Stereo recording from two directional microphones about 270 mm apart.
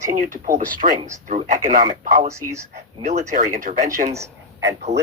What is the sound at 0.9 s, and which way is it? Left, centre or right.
Speech, centre.